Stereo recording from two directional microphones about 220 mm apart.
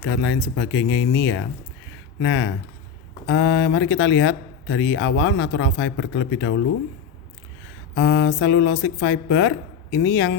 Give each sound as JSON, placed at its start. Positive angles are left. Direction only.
{"t": 0.0, "sound": "speech", "side_deg": 65}
{"t": 7.9, "sound": "a woman's voice", "side_deg": 55}